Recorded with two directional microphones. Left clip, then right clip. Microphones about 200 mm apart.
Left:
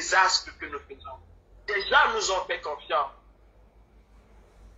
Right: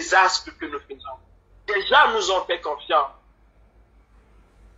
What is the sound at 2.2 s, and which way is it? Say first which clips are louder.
Speech: right 5 dB; 30° right (ahead or behind).